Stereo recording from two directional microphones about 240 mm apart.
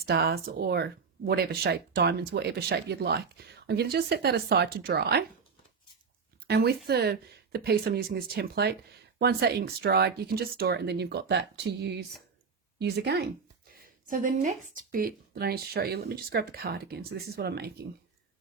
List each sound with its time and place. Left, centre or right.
0.0 s speech: right
6.5 s speech: right